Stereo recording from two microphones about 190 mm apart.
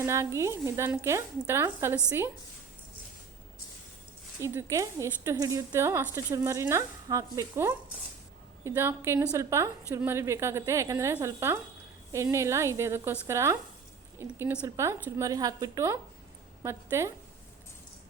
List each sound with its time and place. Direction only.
0.0 s a woman's voice: 15° right (ahead or behind)
4.4 s a woman's voice: 15° right (ahead or behind)